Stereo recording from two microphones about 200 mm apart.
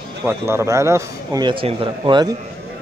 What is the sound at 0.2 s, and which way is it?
A man's voice, 10° right (ahead or behind).